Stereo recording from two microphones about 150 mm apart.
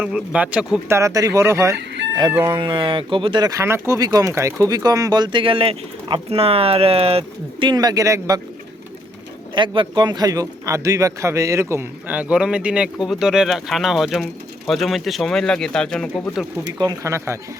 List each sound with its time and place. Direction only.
0.0 s a man's voice: 5° right (ahead or behind)
0.9 s speech: 20° right (ahead or behind)
2.6 s speech: 35° right (ahead or behind)
9.6 s a man's voice: 30° right (ahead or behind); by 16.0 s 5° left (ahead or behind)
16.7 s speech: 25° right (ahead or behind)